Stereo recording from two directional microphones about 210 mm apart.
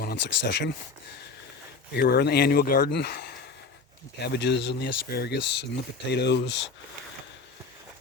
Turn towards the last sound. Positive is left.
turn(degrees=55)  # may be behind; listen again after turning